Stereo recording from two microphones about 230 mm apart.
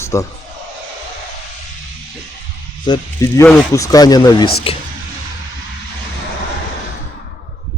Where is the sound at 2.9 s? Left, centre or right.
Centre.